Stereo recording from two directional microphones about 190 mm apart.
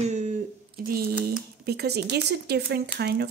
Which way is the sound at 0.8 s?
50° right (ahead or behind).